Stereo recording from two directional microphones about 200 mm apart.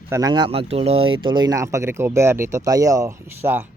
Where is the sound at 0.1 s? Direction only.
15° right (ahead or behind).